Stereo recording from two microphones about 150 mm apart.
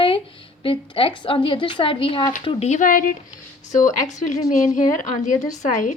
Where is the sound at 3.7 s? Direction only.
55° left (ahead or behind).